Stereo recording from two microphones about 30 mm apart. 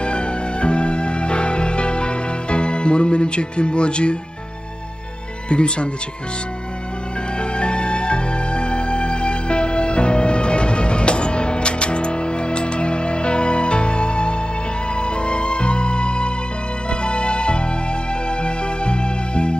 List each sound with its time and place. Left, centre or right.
0.0 s music: left
5.5 s speech: left
7.3 s music: left